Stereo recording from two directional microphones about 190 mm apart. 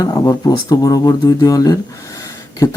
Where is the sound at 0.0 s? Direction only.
20° left (ahead or behind).